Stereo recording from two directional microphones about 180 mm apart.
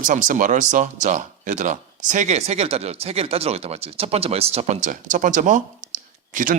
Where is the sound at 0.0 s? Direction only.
45° right (ahead or behind).